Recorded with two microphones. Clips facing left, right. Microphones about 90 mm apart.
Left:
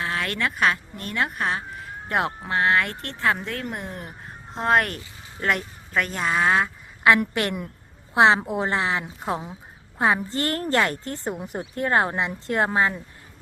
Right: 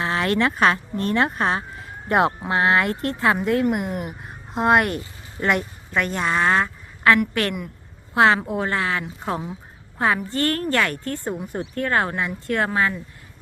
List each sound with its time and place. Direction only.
0.0 s a sound: 25° right (ahead or behind)
0.6 s a woman's voice: 35° right (ahead or behind)
1.8 s speech: 20° right (ahead or behind); by 6.7 s 5° left (ahead or behind)
7.2 s a woman's voice: 25° left (ahead or behind)